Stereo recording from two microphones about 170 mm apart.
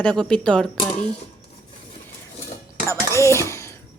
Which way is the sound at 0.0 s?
5° left (ahead or behind).